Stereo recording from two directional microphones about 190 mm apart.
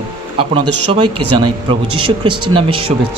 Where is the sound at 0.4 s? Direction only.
30° right (ahead or behind).